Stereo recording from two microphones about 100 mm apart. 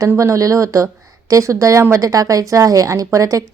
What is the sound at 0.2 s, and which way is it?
Speech, 35° right (ahead or behind).